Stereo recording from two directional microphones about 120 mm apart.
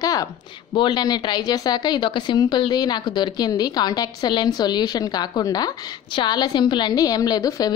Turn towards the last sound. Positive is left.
turn(degrees=30)  # may be behind; listen again after turning